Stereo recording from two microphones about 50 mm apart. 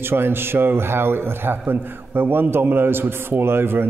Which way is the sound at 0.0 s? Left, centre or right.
Right.